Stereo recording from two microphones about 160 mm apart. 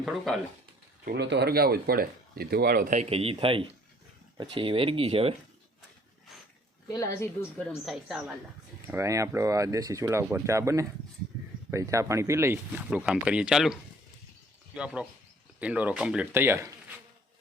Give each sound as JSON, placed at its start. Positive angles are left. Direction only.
{"t": 0.0, "sound": "a woman's voice", "side_deg": 0}
{"t": 1.0, "sound": "speech", "side_deg": -90}
{"t": 3.1, "sound": "speech", "side_deg": -40}
{"t": 6.8, "sound": "a woman's voice", "side_deg": 25}
{"t": 7.9, "sound": "a woman's voice", "side_deg": 0}
{"t": 8.9, "sound": "speech", "side_deg": -20}
{"t": 14.7, "sound": "a woman's voice", "side_deg": -5}